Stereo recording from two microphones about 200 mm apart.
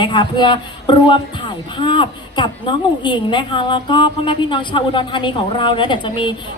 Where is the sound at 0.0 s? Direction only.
25° left (ahead or behind).